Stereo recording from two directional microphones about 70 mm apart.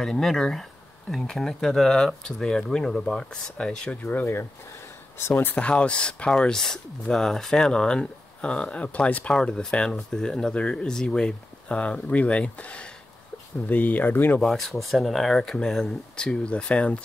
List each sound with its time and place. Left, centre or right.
0.0 s speech: centre
4.0 s speech: left
5.6 s speech: centre
14.4 s speech: centre